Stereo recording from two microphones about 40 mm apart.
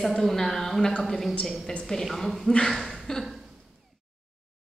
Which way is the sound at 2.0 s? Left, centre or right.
Centre.